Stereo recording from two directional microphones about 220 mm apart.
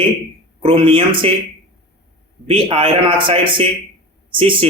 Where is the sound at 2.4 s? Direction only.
25° right (ahead or behind).